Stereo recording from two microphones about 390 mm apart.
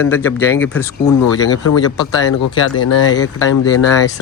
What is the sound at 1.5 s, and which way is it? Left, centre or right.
Speech, left.